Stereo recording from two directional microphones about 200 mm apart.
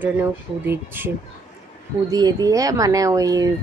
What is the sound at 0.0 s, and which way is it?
A woman's voice, 10° right (ahead or behind).